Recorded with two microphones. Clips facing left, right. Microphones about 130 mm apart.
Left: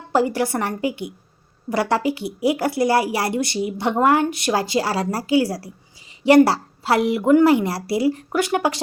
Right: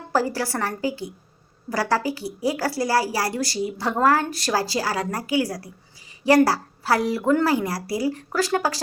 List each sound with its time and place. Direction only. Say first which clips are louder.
0.1 s a woman's voice: left 4 dB; 20° left (ahead or behind)